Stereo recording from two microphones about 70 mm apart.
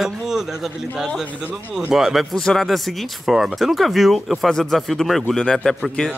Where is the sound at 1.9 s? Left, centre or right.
Centre.